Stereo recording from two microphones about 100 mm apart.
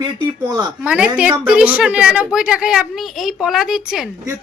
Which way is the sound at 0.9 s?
10° right (ahead or behind).